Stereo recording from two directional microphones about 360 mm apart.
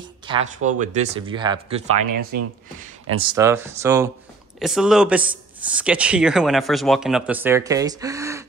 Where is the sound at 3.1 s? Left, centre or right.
Centre.